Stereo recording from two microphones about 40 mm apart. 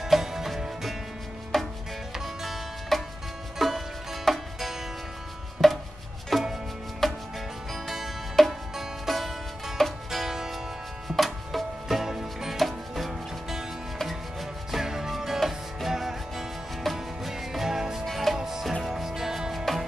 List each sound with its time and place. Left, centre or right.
0.0 s music: centre
1.5 s chopping: centre
2.1 s music: centre
10.1 s music: centre
12.5 s music: centre
14.7 s music: centre
18.0 s music: centre
18.4 s music: centre